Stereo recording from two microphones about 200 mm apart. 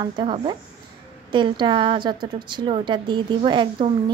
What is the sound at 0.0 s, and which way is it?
Speech, 25° right (ahead or behind).